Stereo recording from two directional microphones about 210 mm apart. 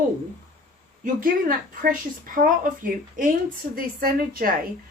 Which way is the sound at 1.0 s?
40° right (ahead or behind).